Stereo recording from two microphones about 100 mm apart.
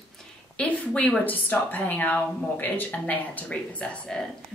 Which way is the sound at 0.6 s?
15° left (ahead or behind).